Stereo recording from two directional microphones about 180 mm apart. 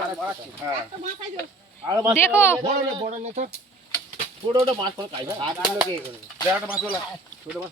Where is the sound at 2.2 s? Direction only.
15° left (ahead or behind).